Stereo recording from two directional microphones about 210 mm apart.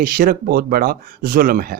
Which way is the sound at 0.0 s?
45° right (ahead or behind).